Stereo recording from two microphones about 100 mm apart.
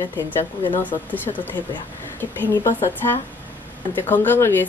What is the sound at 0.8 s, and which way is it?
Speech, 15° left (ahead or behind).